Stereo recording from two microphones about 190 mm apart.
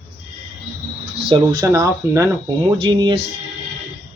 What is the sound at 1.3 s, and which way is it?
Speech, 25° right (ahead or behind).